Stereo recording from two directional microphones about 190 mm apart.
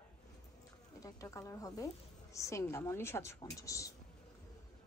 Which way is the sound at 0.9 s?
20° left (ahead or behind).